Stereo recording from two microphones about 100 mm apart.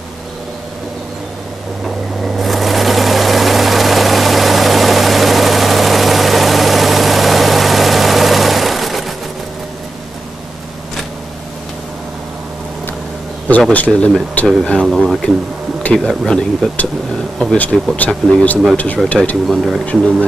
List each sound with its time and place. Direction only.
2.2 s vehicle: centre (ahead or behind)
13.5 s speech: 15° left (ahead or behind)
14.9 s speech: centre (ahead or behind)
17.9 s speech: 15° left (ahead or behind)
19.4 s speech: centre (ahead or behind)
19.9 s speech: 15° left (ahead or behind)